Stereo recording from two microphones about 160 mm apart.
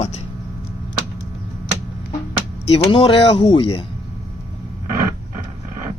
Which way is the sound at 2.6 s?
35° left (ahead or behind).